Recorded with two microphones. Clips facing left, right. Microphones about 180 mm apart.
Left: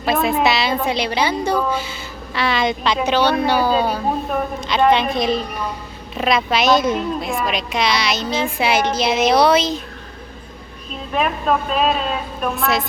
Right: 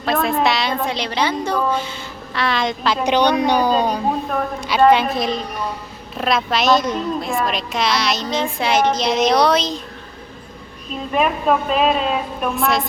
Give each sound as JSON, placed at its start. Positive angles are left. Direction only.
{"t": 0.0, "sound": "a woman's voice", "side_deg": 0}
{"t": 3.1, "sound": "a woman's voice", "side_deg": -15}
{"t": 3.7, "sound": "speech", "side_deg": 10}
{"t": 4.6, "sound": "a woman's voice", "side_deg": -10}
{"t": 11.1, "sound": "a woman's voice", "side_deg": -5}